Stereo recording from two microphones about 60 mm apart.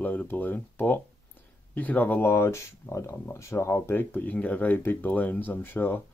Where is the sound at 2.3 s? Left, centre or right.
Left.